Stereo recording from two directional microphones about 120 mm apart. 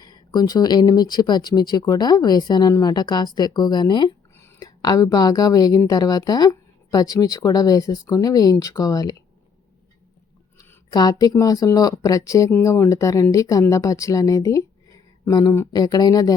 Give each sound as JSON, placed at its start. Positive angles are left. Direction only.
{"t": 0.0, "sound": "a woman's voice", "side_deg": 35}
{"t": 4.4, "sound": "a woman's voice", "side_deg": 25}
{"t": 10.9, "sound": "a woman's voice", "side_deg": 35}